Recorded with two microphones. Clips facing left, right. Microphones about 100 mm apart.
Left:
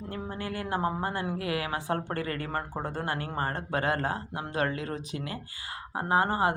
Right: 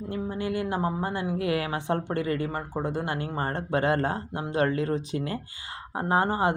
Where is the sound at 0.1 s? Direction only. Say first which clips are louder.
Right 6 dB; 20° right (ahead or behind).